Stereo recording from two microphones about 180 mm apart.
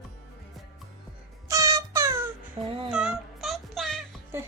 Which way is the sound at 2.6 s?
30° right (ahead or behind).